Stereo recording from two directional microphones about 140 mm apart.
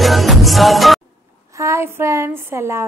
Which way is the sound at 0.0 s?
Centre (ahead or behind).